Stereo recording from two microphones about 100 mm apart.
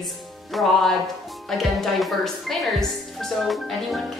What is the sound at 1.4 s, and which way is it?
A woman's voice, centre (ahead or behind).